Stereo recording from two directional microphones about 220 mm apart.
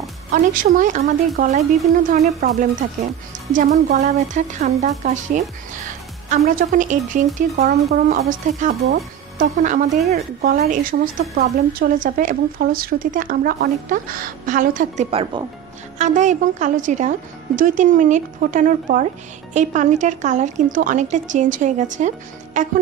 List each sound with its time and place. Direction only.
0.3 s speech: 40° right (ahead or behind)